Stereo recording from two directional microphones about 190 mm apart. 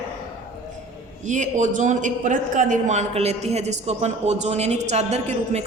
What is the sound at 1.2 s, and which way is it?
A man's voice, 40° right (ahead or behind).